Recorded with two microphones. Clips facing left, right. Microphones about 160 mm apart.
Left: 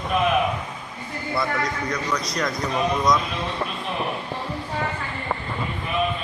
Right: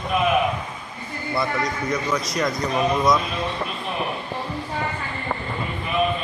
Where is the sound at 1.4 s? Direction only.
20° right (ahead or behind).